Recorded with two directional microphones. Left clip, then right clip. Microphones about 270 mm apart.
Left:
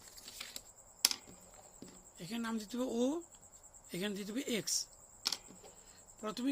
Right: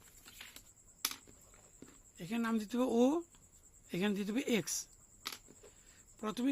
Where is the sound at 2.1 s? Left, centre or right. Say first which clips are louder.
Right 4 dB; centre.